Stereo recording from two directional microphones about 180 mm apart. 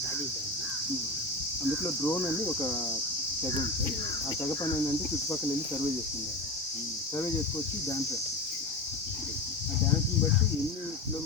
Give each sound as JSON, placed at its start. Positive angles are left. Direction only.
{"t": 2.0, "sound": "speech", "side_deg": 15}